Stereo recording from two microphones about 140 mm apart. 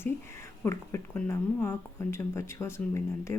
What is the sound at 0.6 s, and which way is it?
Speech, 20° left (ahead or behind).